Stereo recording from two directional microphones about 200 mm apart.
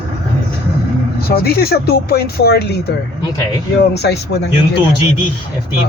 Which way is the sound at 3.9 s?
55° left (ahead or behind).